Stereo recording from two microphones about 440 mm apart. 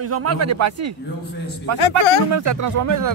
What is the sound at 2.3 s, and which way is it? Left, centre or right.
Speech, right.